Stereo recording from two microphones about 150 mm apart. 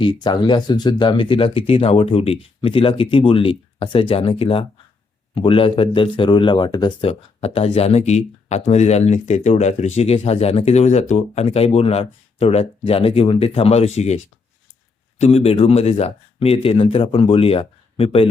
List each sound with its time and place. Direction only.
0.2 s speech: 30° left (ahead or behind); by 14.2 s 45° left (ahead or behind)
15.2 s speech: 45° left (ahead or behind)